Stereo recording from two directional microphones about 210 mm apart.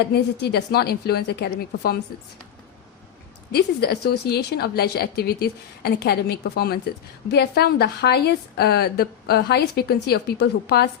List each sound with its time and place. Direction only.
0.0 s a woman's voice: 50° left (ahead or behind)
3.5 s a woman's voice: 50° left (ahead or behind)